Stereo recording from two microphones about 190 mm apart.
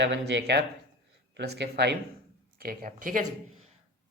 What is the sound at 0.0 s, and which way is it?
Speech, 65° right (ahead or behind).